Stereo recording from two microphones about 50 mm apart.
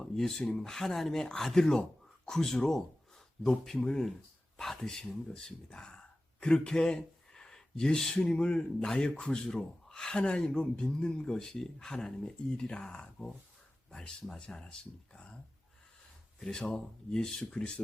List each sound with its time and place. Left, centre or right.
0.0 s speech: centre
3.8 s speech: centre
16.4 s speech: centre